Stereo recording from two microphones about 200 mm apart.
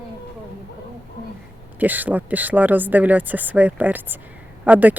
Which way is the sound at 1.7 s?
10° right (ahead or behind).